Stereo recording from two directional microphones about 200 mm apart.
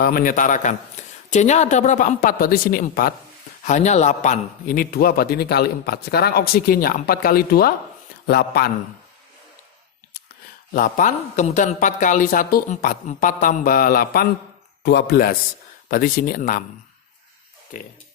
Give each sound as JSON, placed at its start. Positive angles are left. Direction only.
{"t": 0.0, "sound": "speech", "side_deg": 45}
{"t": 3.6, "sound": "a man's voice", "side_deg": 35}
{"t": 10.8, "sound": "a man's voice", "side_deg": 40}